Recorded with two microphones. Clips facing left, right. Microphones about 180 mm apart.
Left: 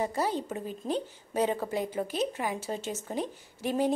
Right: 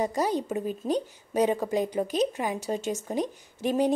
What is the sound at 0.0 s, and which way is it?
Speech, 15° right (ahead or behind).